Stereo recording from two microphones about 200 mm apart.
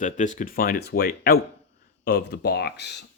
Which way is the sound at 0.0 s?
40° left (ahead or behind).